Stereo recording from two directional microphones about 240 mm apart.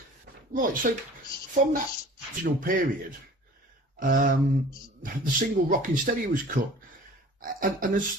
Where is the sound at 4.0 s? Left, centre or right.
Right.